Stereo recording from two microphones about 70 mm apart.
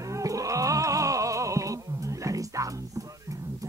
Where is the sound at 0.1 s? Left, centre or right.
Right.